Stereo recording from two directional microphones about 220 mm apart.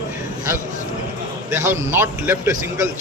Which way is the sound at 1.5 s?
10° right (ahead or behind).